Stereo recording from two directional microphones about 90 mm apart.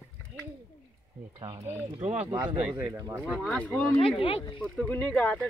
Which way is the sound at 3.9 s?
80° left.